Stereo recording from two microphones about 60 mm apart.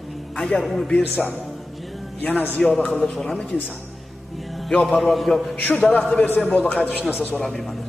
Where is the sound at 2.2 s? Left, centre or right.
Left.